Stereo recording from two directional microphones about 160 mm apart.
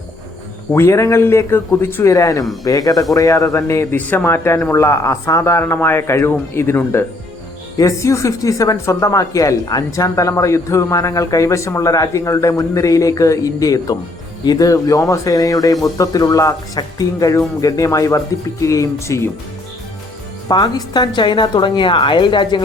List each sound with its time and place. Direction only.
0.7 s a man's voice: 15° left (ahead or behind)
20.5 s speech: 25° left (ahead or behind)